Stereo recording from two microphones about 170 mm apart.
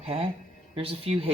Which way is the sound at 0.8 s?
35° right (ahead or behind).